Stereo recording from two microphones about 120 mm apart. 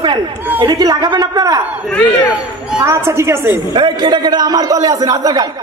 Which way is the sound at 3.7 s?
40° right (ahead or behind).